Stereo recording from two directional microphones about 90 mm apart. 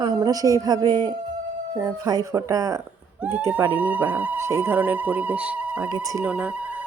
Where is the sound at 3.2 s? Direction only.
15° right (ahead or behind).